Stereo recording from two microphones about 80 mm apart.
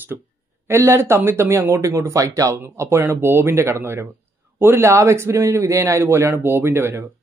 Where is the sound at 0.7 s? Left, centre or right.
Right.